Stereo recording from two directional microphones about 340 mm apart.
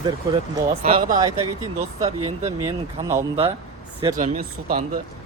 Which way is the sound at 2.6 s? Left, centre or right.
Centre.